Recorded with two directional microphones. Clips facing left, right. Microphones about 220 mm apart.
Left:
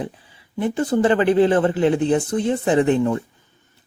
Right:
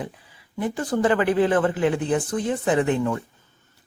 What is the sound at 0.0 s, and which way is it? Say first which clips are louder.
Speech: left 4 dB; 25° left (ahead or behind).